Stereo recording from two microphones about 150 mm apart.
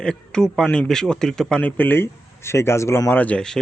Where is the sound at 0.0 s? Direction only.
5° left (ahead or behind).